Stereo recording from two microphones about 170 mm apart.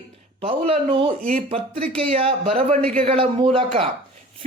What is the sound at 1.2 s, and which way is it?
Speech, 55° right (ahead or behind).